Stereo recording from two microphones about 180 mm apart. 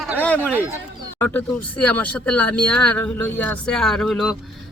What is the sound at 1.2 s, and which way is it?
Speech, 10° left (ahead or behind).